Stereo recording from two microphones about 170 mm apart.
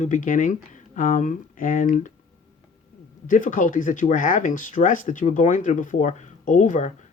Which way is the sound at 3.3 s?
50° left (ahead or behind).